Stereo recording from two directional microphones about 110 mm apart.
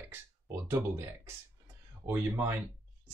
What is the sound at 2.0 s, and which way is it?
Speech, 20° right (ahead or behind).